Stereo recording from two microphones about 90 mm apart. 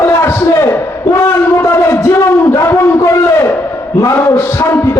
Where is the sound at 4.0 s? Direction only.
35° left (ahead or behind).